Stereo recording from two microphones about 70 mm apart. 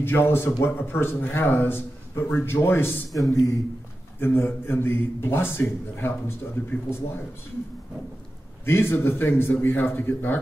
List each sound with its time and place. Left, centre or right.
0.0 s speech: left
4.2 s speech: left
8.6 s speech: left